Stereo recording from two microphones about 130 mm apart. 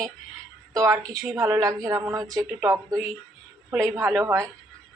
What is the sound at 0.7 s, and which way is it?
Speech, 25° right (ahead or behind).